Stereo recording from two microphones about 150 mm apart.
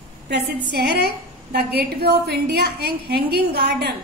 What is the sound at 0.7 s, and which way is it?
A woman's voice, 90° right.